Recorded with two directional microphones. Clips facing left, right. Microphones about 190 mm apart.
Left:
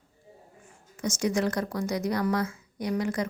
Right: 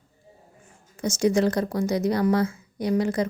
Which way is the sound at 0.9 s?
30° right (ahead or behind).